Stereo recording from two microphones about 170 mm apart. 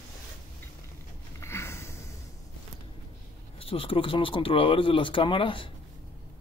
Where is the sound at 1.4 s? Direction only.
15° left (ahead or behind).